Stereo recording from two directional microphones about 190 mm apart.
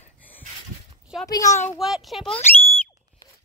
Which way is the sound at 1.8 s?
Centre (ahead or behind).